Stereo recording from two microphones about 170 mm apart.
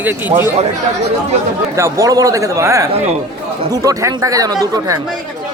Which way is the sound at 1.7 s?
20° right (ahead or behind).